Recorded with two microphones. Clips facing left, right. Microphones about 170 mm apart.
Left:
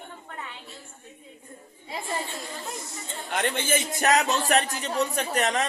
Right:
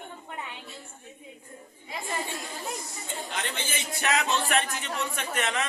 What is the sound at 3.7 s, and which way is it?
Speech, 45° left (ahead or behind).